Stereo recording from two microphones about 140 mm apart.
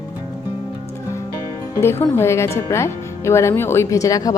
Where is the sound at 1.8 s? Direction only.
15° left (ahead or behind).